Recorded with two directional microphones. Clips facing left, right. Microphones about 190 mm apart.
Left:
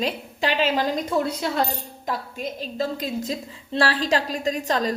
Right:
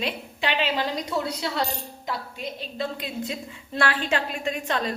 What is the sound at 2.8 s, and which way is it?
A woman's voice, 40° left (ahead or behind).